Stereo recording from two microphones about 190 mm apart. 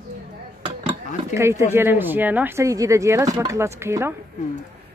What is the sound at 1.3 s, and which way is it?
Speech, 15° right (ahead or behind).